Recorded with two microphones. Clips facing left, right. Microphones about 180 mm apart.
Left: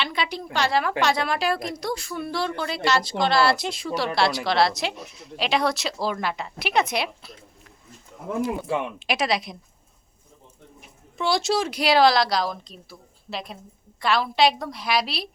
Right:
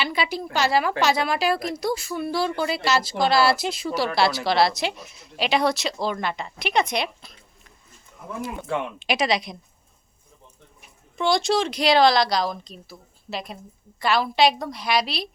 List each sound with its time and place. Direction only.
0.0 s a sound: 5° right (ahead or behind)
0.5 s a woman's voice: 5° right (ahead or behind)
8.6 s a woman's voice: 5° left (ahead or behind)
11.2 s a woman's voice: 5° left (ahead or behind)